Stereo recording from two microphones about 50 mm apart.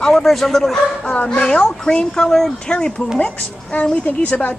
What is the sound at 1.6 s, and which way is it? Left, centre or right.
A woman's voice, centre.